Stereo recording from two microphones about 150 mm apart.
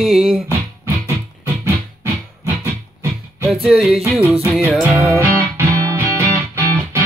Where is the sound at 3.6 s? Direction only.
5° right (ahead or behind).